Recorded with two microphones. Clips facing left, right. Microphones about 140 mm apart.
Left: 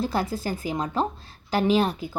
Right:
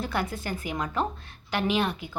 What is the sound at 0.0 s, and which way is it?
A woman's voice, 35° left (ahead or behind).